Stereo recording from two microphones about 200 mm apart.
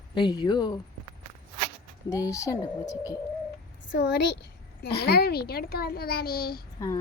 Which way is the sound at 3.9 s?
55° left (ahead or behind).